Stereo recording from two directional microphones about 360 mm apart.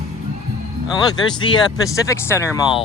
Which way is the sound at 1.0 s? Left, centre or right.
Centre.